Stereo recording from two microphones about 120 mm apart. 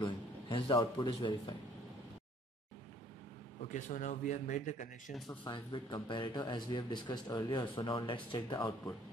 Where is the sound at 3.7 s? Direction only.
85° left.